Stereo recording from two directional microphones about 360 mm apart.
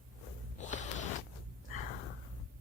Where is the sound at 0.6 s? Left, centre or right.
Centre.